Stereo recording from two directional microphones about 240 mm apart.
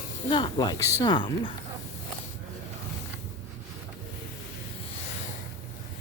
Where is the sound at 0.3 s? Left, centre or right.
Centre.